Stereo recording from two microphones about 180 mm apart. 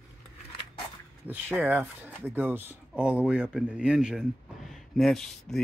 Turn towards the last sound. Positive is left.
turn(degrees=0)  # may be behind; listen again after turning